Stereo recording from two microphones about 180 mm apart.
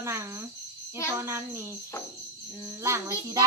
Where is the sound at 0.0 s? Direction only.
15° right (ahead or behind).